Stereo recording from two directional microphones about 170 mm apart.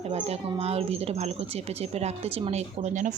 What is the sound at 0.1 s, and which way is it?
Speech, 35° right (ahead or behind).